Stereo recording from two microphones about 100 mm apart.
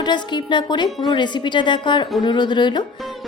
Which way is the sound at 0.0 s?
50° left (ahead or behind).